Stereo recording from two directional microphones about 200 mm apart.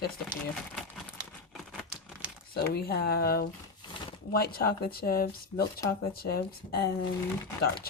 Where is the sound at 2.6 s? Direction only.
50° left (ahead or behind).